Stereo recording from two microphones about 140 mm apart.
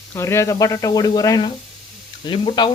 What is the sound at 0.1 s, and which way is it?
Speech, 20° left (ahead or behind).